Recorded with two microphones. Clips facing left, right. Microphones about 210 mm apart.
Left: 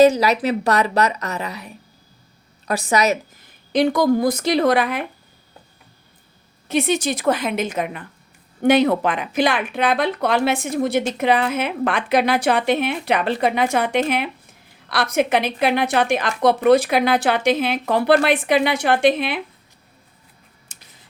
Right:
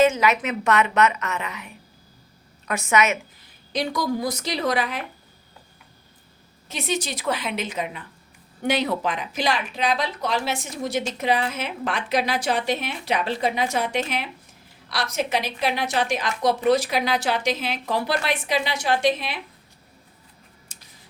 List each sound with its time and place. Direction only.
0.0 s a woman's voice: 35° left (ahead or behind)
3.7 s speech: 55° left (ahead or behind)
6.7 s speech: 60° left (ahead or behind)